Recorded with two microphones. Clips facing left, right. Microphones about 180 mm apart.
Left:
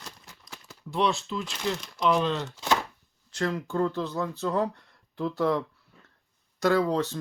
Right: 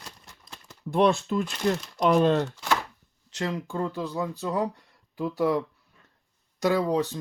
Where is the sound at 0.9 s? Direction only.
50° right (ahead or behind).